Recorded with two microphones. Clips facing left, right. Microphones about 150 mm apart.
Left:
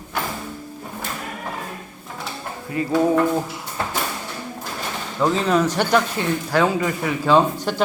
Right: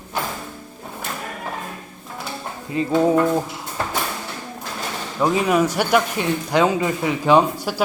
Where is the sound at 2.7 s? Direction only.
20° right (ahead or behind).